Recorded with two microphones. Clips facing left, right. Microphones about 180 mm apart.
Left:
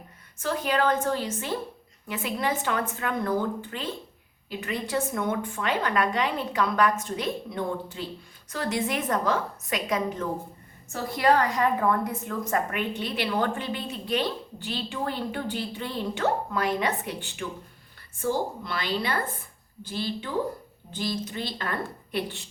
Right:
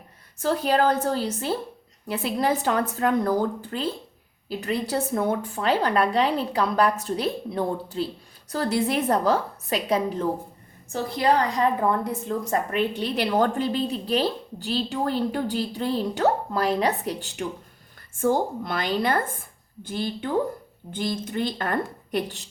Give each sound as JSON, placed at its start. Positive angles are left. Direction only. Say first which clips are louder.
{"t": 0.3, "sound": "a woman's voice", "louder": "right 4 dB", "side_deg": -35}
{"t": 18.2, "sound": "a woman's voice", "louder": "right 5 dB", "side_deg": -50}